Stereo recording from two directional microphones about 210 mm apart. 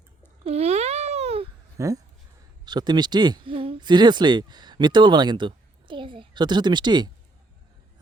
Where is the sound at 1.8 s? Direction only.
15° right (ahead or behind).